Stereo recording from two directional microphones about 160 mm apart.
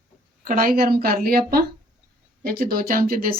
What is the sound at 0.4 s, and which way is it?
A woman's voice, 60° right (ahead or behind).